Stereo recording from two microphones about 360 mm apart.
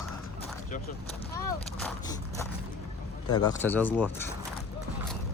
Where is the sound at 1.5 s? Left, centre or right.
Centre.